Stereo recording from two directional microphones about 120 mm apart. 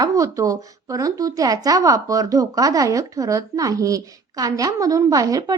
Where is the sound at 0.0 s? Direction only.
30° right (ahead or behind).